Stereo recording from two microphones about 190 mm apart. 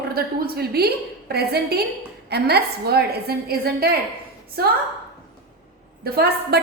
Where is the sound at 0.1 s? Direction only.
55° right (ahead or behind).